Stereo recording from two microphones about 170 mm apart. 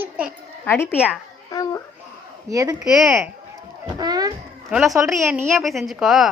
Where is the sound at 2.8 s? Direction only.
Centre (ahead or behind).